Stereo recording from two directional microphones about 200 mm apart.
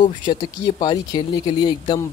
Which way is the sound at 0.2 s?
20° left (ahead or behind).